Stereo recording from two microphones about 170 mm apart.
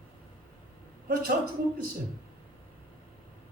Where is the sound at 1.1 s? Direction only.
60° right (ahead or behind).